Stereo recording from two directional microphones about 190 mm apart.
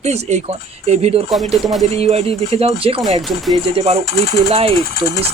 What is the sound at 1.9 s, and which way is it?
Speech, 30° right (ahead or behind).